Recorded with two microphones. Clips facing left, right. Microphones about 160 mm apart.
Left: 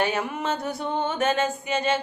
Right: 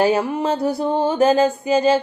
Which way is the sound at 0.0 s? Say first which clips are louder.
Right 8 dB; 35° right (ahead or behind).